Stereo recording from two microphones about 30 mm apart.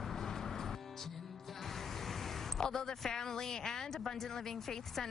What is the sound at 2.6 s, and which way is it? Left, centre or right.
A man's voice, centre.